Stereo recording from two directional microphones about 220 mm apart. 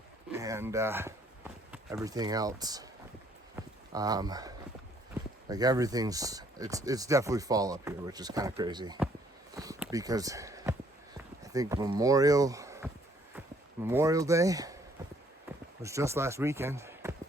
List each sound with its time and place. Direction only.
0.3 s speech: 15° right (ahead or behind)
3.5 s a sound: 15° right (ahead or behind)
5.5 s speech: 15° right (ahead or behind)
9.6 s a sound: 15° right (ahead or behind)
11.4 s speech: 15° right (ahead or behind)
13.8 s speech: 15° right (ahead or behind)
15.8 s speech: 15° right (ahead or behind)